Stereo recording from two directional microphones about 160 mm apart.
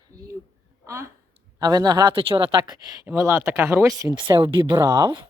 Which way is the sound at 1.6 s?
25° right (ahead or behind).